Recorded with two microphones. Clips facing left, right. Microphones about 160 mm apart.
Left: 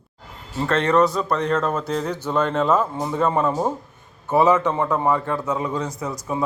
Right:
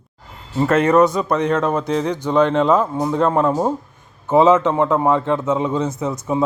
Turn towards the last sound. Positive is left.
turn(degrees=-25)  # may be behind; listen again after turning